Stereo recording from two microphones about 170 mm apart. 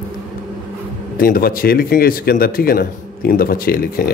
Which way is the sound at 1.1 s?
60° left (ahead or behind).